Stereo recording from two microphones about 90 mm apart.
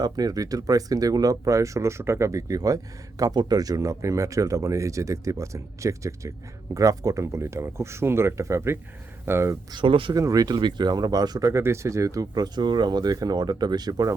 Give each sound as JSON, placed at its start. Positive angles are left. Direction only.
{"t": 0.0, "sound": "speech", "side_deg": -45}
{"t": 9.7, "sound": "speech", "side_deg": -70}
{"t": 10.2, "sound": "speech", "side_deg": -40}
{"t": 11.5, "sound": "speech", "side_deg": -30}